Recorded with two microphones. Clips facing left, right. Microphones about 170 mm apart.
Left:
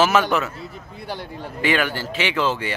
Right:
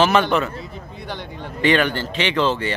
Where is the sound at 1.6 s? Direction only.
5° left (ahead or behind).